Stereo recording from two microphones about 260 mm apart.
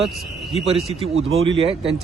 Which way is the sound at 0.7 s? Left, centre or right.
Right.